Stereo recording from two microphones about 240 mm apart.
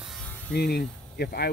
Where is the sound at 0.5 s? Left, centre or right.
Left.